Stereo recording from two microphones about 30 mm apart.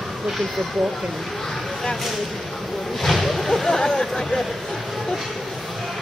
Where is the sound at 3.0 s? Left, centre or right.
Centre.